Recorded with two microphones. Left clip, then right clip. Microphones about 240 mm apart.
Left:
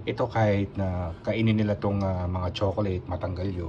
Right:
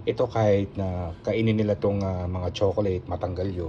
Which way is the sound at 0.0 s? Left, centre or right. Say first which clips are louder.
Right 2 dB; centre.